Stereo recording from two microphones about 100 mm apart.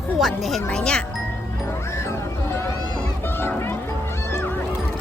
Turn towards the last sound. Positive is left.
turn(degrees=20)  # may be behind; listen again after turning